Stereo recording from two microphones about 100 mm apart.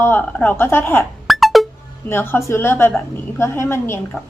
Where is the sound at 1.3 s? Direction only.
Centre (ahead or behind).